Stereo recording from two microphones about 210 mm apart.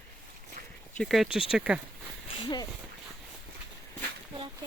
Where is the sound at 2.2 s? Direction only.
20° left (ahead or behind).